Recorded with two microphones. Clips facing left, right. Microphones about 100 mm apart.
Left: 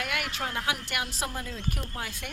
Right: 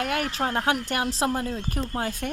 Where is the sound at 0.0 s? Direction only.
35° right (ahead or behind).